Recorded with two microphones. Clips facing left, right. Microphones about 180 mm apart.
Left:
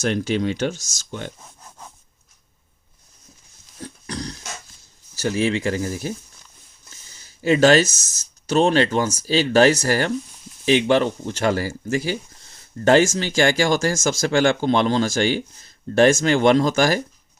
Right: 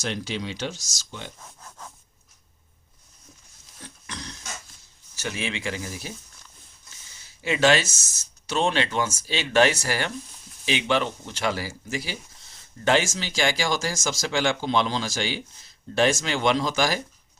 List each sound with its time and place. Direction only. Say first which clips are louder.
0.0 s speech: left 9 dB; 50° left (ahead or behind)
3.8 s a sound: left 9 dB; 35° left (ahead or behind)
5.1 s speech: left 10 dB; 35° left (ahead or behind)
7.4 s speech: left 6 dB; 40° left (ahead or behind)